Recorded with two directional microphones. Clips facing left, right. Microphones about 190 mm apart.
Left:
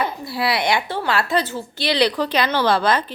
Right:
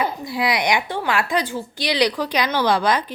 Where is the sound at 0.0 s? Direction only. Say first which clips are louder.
Even; 15° right (ahead or behind).